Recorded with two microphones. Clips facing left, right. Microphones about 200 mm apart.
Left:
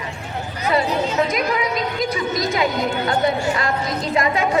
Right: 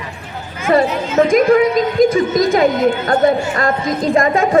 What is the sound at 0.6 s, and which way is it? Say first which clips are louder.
A woman's voice: right 5 dB; 50° right (ahead or behind).